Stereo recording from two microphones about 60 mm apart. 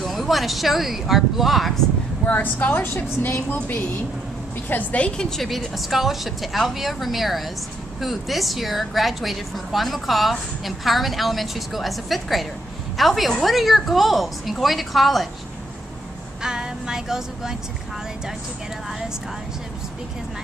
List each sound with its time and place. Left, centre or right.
0.0 s a woman's voice: centre
2.2 s a woman's voice: left
3.5 s a woman's voice: left
5.2 s a woman's voice: centre
16.4 s music: centre